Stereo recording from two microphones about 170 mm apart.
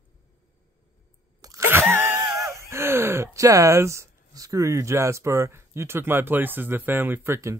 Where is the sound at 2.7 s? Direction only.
15° right (ahead or behind).